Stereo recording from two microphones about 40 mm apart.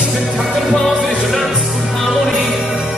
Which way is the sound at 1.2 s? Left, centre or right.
Centre.